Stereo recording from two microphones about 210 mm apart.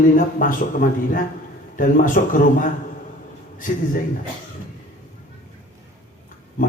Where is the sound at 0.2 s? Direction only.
40° left (ahead or behind).